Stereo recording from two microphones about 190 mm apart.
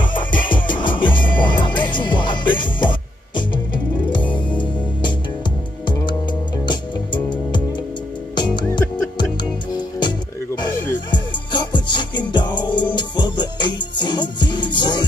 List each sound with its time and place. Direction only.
0.0 s music: 25° left (ahead or behind)
5.9 s music: 25° left (ahead or behind)
8.4 s music: 25° left (ahead or behind)
9.9 s music: 25° left (ahead or behind)